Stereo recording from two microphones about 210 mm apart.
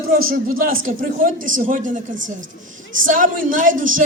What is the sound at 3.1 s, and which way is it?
Speech, 40° right (ahead or behind).